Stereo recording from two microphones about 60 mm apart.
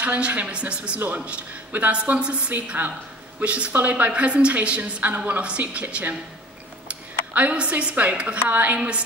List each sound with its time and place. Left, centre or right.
0.0 s a woman's voice: right
2.5 s a man's voice: right
3.3 s a woman's voice: right